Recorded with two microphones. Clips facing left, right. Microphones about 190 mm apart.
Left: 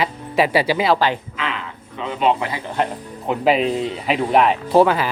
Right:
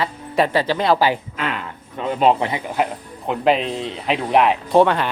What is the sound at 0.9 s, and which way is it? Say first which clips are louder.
Speech: right 1 dB; 10° right (ahead or behind).